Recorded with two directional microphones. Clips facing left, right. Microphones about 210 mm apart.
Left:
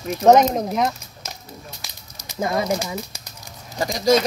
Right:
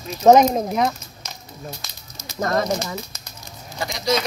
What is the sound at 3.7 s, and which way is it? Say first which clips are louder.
Speech: left 5 dB; 40° left (ahead or behind).